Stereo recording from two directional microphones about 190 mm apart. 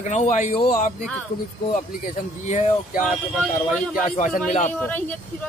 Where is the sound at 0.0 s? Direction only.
40° left (ahead or behind).